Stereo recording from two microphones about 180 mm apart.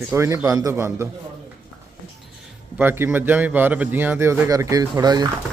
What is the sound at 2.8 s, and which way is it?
Speech, 10° right (ahead or behind).